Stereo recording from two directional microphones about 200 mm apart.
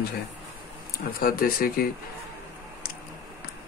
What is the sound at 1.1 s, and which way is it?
Speech, 45° left (ahead or behind).